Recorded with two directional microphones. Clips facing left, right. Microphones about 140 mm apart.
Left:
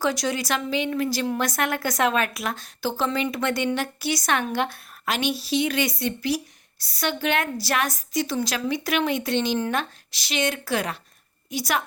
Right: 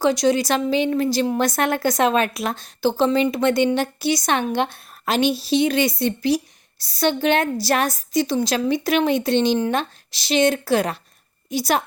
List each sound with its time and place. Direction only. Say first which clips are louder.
0.0 s a woman's voice: right 7 dB; 20° right (ahead or behind)